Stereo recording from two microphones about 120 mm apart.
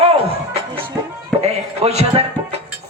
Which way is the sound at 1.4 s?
60° right (ahead or behind).